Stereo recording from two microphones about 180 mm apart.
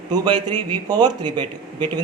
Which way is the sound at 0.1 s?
25° right (ahead or behind).